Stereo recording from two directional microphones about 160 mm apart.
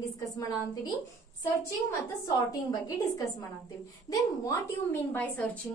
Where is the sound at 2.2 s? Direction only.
20° left (ahead or behind).